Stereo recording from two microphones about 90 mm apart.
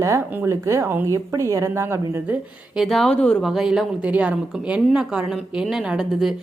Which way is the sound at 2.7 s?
Centre (ahead or behind).